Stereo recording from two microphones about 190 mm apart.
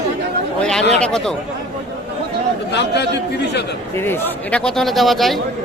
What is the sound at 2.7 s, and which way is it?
Speech, 65° left (ahead or behind).